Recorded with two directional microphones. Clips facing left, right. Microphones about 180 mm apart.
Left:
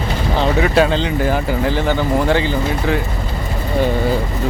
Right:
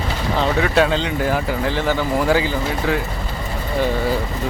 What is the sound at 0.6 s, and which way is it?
Speech, centre (ahead or behind).